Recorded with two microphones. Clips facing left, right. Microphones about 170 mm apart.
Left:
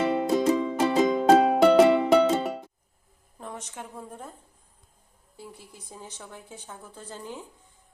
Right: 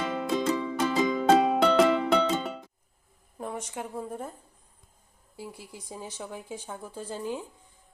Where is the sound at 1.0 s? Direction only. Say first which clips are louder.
Left 3 dB; 45° left (ahead or behind).